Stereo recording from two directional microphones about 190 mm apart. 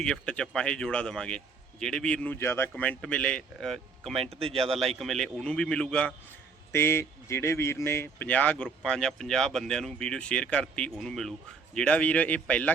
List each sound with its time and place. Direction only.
0.0 s speech: 5° left (ahead or behind)
4.2 s speech: 30° right (ahead or behind)
4.9 s speech: centre (ahead or behind)